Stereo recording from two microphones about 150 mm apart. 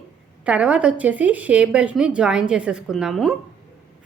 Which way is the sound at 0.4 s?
5° right (ahead or behind).